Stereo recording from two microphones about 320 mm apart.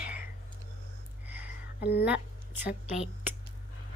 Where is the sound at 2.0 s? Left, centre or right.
Centre.